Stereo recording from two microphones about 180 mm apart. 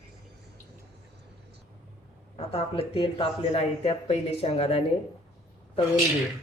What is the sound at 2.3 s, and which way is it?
Speech, 35° left (ahead or behind).